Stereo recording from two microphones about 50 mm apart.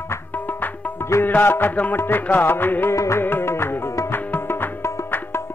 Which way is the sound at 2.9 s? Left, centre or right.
Left.